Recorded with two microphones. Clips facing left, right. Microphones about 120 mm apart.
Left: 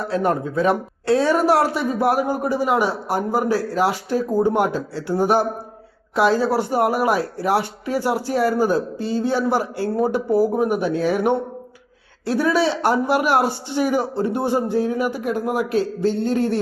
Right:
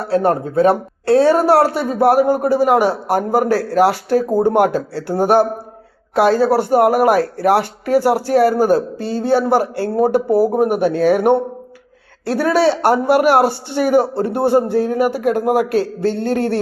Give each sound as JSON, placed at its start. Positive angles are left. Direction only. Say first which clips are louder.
{"t": 0.1, "sound": "speech", "louder": "right 6 dB", "side_deg": -30}
{"t": 1.5, "sound": "a man's voice", "louder": "right 5 dB", "side_deg": -65}
{"t": 4.3, "sound": "speech", "louder": "right 1 dB", "side_deg": -35}
{"t": 4.5, "sound": "a man's voice", "louder": "right 6 dB", "side_deg": -70}